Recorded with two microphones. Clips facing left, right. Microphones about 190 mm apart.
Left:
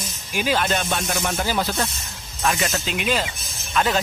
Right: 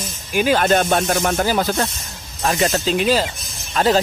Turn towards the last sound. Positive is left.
turn(degrees=-35)  # may be behind; listen again after turning